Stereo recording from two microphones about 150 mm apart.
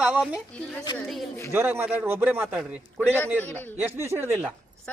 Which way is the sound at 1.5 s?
15° right (ahead or behind).